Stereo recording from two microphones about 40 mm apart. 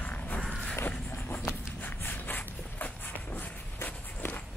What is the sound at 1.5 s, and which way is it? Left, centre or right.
Walk, left.